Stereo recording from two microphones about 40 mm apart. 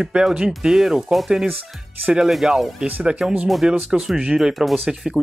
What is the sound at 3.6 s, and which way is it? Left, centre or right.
Speech, right.